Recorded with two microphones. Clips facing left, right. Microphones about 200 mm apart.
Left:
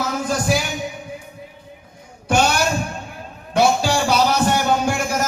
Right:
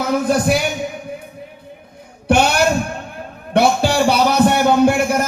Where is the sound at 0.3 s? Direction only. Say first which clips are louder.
Right 3 dB; 60° right (ahead or behind).